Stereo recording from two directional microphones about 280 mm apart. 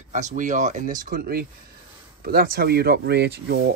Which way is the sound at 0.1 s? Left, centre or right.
Right.